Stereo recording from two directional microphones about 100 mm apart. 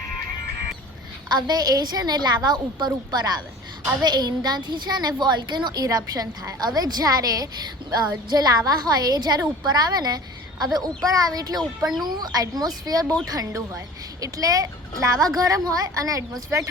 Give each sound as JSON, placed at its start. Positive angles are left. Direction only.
{"t": 1.3, "sound": "a woman's voice", "side_deg": -45}
{"t": 5.8, "sound": "a woman's voice", "side_deg": -35}